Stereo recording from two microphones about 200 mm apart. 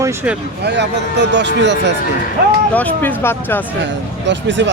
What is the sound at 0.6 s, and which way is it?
Speech, 60° right (ahead or behind).